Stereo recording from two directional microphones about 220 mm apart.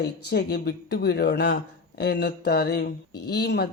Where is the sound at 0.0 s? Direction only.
50° left (ahead or behind).